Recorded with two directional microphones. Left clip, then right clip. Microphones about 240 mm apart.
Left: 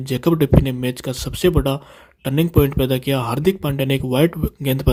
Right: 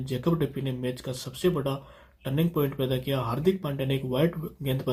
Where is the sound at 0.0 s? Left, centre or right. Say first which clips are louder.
Left 10 dB; left.